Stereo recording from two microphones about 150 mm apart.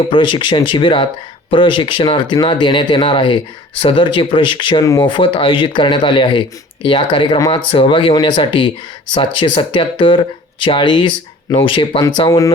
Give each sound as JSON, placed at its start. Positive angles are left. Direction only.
{"t": 0.1, "sound": "speech", "side_deg": 35}